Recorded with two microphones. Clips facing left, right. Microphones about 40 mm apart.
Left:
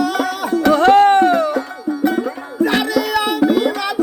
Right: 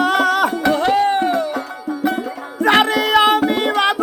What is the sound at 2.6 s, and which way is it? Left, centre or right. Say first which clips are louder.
Music: right 2 dB; right.